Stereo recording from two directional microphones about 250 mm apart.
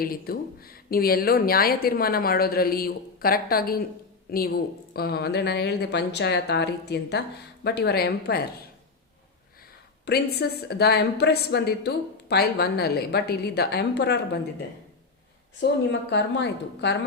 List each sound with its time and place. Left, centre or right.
0.0 s a woman's voice: left
10.1 s a woman's voice: left
15.9 s a woman's voice: left